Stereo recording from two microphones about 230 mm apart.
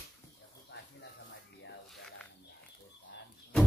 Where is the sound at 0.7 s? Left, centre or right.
Left.